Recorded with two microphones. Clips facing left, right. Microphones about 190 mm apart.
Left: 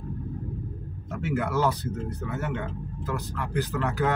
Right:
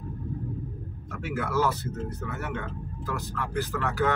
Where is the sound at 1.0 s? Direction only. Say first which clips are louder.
Left 4 dB; 20° left (ahead or behind).